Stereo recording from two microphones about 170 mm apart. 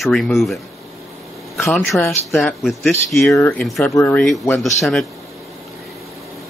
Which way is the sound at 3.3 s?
15° left (ahead or behind).